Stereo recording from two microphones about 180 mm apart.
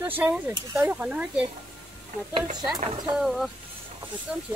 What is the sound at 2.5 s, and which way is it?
Speech, 20° right (ahead or behind).